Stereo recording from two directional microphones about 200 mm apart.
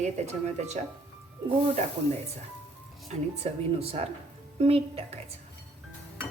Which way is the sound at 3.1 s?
30° right (ahead or behind).